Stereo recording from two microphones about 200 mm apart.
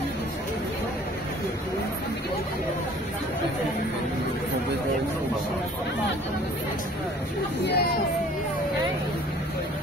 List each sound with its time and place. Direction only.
7.6 s speech: 55° left (ahead or behind)